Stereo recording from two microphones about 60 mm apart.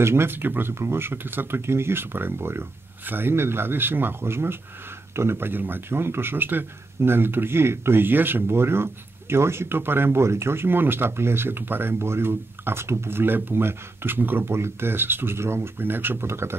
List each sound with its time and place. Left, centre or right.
0.0 s speech: right